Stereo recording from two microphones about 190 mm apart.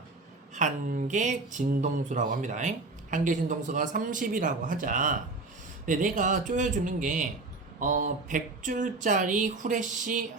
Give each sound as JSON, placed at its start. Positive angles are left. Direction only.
{"t": 0.5, "sound": "speech", "side_deg": -40}